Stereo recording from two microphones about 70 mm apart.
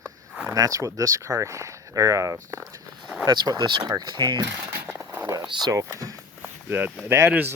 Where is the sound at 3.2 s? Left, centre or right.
Right.